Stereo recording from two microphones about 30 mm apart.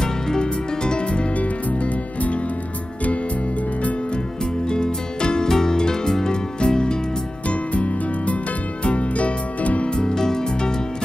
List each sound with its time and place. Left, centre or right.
0.0 s music: left
1.3 s music: left
4.6 s music: left
7.4 s music: left
9.8 s music: left
10.1 s music: centre